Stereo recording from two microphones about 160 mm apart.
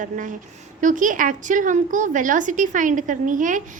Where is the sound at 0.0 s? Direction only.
55° right (ahead or behind).